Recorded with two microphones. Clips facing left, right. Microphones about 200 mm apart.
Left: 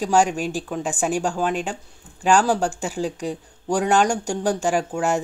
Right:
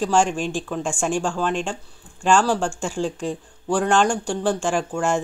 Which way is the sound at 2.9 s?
10° left (ahead or behind).